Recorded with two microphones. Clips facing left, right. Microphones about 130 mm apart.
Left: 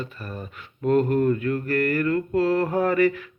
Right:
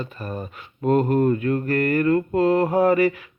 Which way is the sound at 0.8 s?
20° right (ahead or behind).